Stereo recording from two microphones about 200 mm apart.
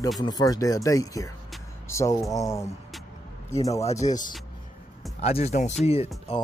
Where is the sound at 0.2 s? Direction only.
20° left (ahead or behind).